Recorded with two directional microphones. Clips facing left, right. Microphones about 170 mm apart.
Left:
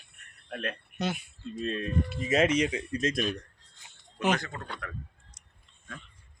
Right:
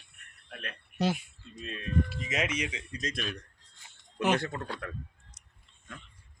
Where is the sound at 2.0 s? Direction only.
25° left (ahead or behind).